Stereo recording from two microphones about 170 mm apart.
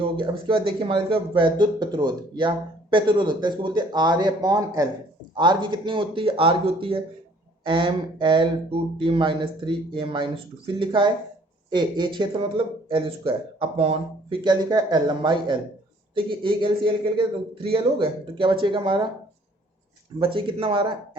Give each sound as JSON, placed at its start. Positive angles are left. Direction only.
{"t": 0.2, "sound": "speech", "side_deg": -30}
{"t": 20.1, "sound": "speech", "side_deg": -30}